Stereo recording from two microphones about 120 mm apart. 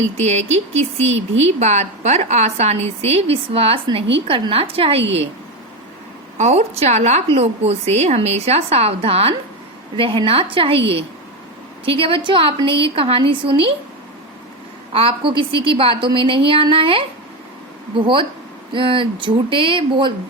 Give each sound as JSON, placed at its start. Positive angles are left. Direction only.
{"t": 0.2, "sound": "a woman's voice", "side_deg": -65}
{"t": 6.3, "sound": "a woman's voice", "side_deg": -70}
{"t": 14.9, "sound": "a woman's voice", "side_deg": -45}